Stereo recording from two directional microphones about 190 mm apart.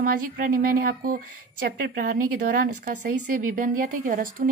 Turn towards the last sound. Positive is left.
turn(degrees=-45)  # may be behind; listen again after turning